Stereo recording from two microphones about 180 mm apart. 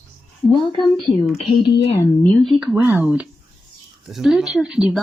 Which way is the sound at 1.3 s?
25° left (ahead or behind).